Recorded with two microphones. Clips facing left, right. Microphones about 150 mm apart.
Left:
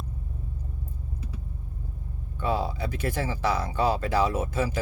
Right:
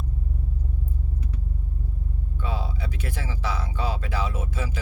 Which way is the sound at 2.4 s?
45° left (ahead or behind).